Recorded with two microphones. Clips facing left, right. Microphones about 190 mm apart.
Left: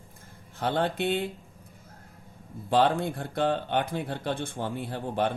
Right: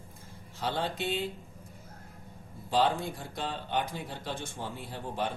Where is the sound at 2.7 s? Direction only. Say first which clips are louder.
Left 4 dB; 60° left (ahead or behind).